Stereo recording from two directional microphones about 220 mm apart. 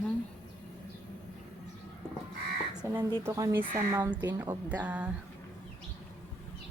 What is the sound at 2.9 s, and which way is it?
A woman's voice, 10° right (ahead or behind).